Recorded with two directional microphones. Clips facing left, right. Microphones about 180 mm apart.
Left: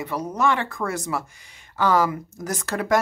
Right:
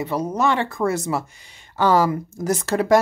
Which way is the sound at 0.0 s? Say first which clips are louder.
Right 2 dB; 25° right (ahead or behind).